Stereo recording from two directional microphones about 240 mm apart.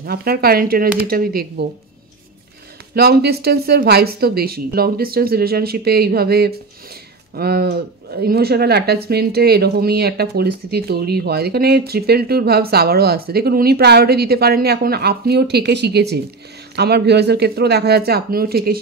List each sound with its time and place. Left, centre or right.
0.0 s speech: right
2.9 s speech: right